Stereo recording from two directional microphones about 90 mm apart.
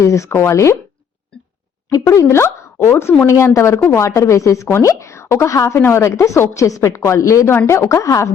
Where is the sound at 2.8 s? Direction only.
25° left (ahead or behind).